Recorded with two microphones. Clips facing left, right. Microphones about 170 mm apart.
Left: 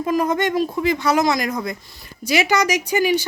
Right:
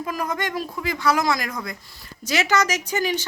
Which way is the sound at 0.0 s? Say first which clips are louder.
Left 8 dB; 25° left (ahead or behind).